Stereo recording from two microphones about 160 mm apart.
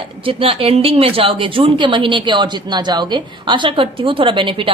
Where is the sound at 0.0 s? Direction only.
35° right (ahead or behind).